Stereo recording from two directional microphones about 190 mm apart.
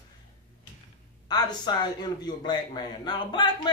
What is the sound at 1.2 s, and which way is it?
A man's voice, 20° left (ahead or behind).